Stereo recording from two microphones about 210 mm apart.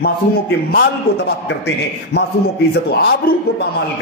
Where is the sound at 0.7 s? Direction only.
50° left (ahead or behind).